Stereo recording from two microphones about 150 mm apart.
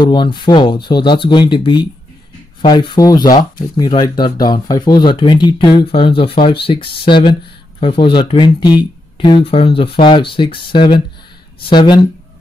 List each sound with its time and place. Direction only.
0.0 s speech: 30° left (ahead or behind)